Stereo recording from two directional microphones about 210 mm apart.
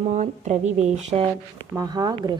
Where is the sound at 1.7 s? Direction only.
15° right (ahead or behind).